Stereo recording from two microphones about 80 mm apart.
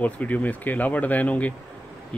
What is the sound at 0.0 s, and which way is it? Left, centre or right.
Speech, centre.